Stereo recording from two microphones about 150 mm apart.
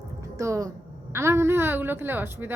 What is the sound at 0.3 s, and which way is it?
A woman's voice, 20° right (ahead or behind).